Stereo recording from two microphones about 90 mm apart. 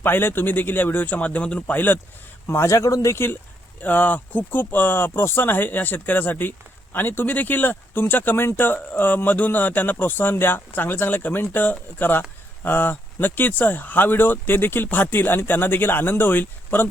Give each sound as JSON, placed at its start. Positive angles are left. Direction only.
{"t": 0.0, "sound": "speech", "side_deg": 25}
{"t": 3.8, "sound": "speech", "side_deg": 20}